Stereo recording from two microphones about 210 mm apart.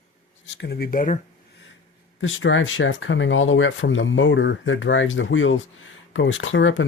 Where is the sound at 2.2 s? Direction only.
65° left (ahead or behind).